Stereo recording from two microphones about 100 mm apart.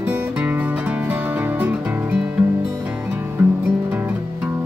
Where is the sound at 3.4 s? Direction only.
20° right (ahead or behind).